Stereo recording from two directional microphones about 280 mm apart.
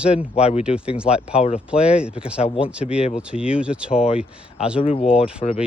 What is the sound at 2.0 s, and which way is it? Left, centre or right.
Speech, centre.